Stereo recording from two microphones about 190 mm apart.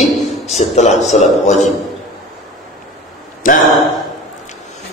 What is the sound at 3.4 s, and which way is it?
Speech, 45° left (ahead or behind).